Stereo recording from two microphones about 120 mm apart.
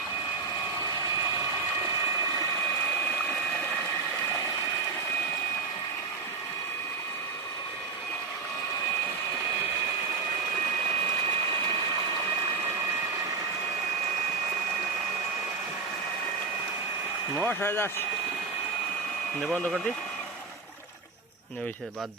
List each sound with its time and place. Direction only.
17.3 s speech: 15° left (ahead or behind)